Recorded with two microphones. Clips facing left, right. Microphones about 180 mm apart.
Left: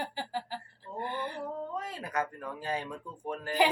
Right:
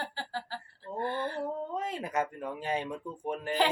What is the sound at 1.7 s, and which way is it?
Speech, 20° right (ahead or behind).